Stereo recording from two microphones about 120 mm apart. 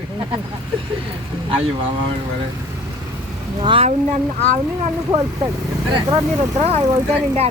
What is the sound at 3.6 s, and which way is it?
Speech, 50° right (ahead or behind).